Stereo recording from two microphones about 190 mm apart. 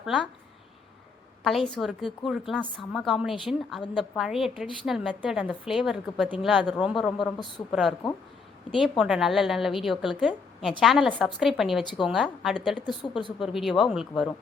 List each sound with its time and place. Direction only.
0.0 s a woman's voice: 5° right (ahead or behind)
1.5 s a woman's voice: 5° left (ahead or behind)
7.3 s speech: 25° left (ahead or behind)
7.7 s a woman's voice: centre (ahead or behind)
12.7 s speech: 25° left (ahead or behind)
13.4 s a woman's voice: centre (ahead or behind)